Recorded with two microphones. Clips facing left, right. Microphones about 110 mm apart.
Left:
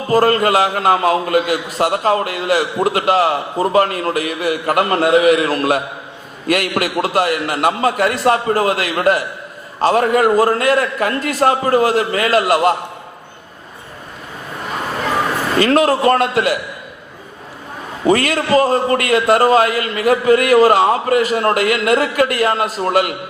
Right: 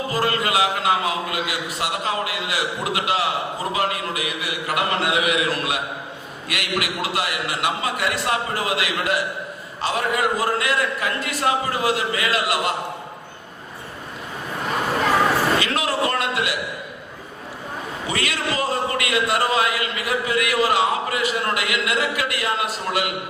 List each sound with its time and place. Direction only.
0.1 s a man's voice: 45° left (ahead or behind)
15.5 s a man's voice: 45° left (ahead or behind)
18.0 s a man's voice: 45° left (ahead or behind)